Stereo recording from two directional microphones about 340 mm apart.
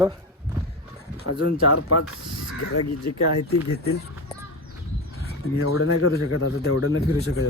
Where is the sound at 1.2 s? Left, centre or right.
Left.